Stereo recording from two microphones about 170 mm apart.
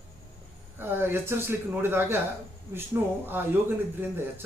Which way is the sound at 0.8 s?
10° right (ahead or behind).